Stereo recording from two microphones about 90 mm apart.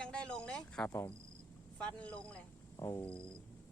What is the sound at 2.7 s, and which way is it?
Music, 35° left (ahead or behind).